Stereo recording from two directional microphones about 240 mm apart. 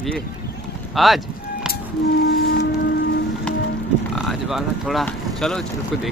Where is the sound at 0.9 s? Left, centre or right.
Centre.